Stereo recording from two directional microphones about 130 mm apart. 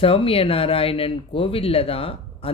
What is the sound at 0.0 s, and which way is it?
Speech, 45° left (ahead or behind).